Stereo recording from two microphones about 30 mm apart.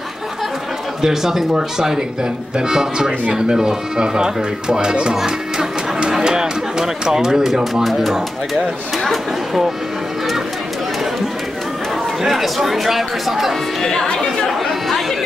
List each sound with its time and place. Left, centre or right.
1.0 s speech: centre
5.1 s music: centre
6.1 s speech: right; by 9.6 s centre
12.2 s speech: centre
13.7 s speech: centre
14.6 s chatter: centre